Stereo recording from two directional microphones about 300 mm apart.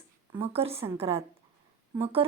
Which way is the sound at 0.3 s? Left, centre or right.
Centre.